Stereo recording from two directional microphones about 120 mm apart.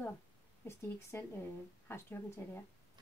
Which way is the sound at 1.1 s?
20° left (ahead or behind).